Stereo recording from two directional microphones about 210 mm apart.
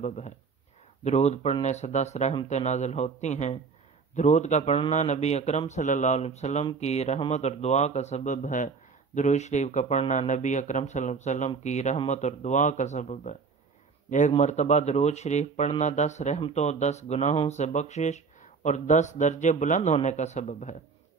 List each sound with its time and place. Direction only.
0.0 s a man's voice: 35° left (ahead or behind)